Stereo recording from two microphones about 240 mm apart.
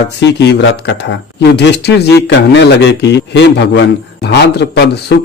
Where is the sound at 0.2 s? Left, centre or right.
Left.